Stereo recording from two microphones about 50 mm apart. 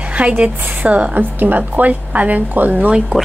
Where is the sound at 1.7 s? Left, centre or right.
Right.